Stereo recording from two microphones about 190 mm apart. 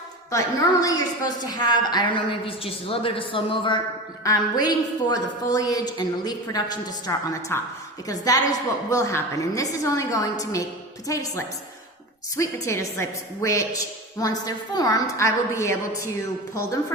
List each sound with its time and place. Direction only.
0.3 s a woman's voice: 15° left (ahead or behind)